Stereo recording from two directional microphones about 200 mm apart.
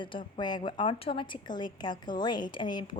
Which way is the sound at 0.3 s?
20° left (ahead or behind).